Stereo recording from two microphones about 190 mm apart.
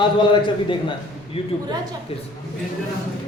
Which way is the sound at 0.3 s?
25° left (ahead or behind).